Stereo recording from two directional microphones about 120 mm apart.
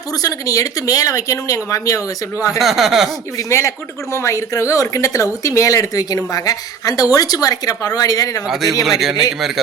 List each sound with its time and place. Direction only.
0.1 s speech: 30° left (ahead or behind)
2.6 s speech: centre (ahead or behind)
3.3 s speech: 25° left (ahead or behind)
8.4 s speech: centre (ahead or behind)